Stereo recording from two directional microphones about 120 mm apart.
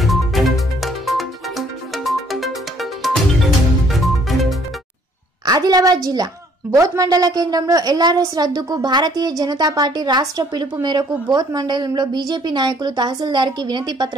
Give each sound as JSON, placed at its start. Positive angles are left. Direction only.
{"t": 0.0, "sound": "music", "side_deg": 0}
{"t": 5.4, "sound": "a woman's voice", "side_deg": -30}